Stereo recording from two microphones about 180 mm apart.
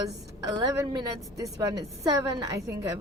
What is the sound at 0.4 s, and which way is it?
Speech, 20° right (ahead or behind).